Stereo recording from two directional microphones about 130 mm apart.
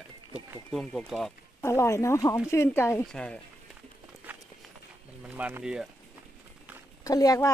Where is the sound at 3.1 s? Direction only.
5° left (ahead or behind).